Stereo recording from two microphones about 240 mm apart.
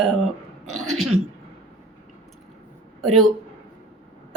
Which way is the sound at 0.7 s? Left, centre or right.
Right.